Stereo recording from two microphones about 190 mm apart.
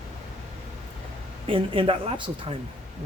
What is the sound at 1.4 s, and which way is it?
Speech, 30° right (ahead or behind).